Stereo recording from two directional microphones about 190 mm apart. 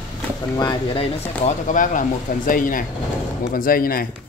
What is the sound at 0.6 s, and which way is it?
Speech, 20° left (ahead or behind).